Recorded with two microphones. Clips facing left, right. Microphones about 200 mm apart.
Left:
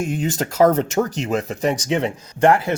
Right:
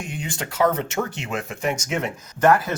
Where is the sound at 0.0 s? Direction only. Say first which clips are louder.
Left 9 dB; 40° left (ahead or behind).